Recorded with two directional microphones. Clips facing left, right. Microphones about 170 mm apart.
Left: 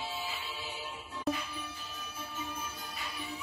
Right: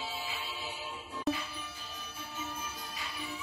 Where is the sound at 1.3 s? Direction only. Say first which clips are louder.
Right 1 dB; centre (ahead or behind).